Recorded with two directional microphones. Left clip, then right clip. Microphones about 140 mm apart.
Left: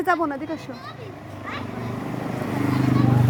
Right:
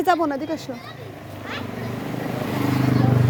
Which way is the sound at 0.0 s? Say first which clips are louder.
Right 2 dB; 40° right (ahead or behind).